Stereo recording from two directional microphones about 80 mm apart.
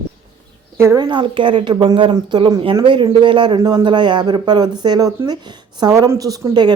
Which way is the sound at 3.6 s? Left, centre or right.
Right.